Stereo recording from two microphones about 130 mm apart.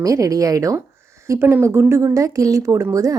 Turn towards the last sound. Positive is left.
turn(degrees=-25)  # may be behind; listen again after turning